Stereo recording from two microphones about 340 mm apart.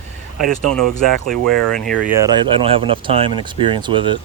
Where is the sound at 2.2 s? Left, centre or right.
Centre.